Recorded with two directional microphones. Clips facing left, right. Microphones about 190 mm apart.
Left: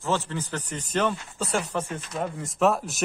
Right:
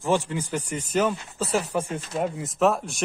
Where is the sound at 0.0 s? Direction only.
15° right (ahead or behind).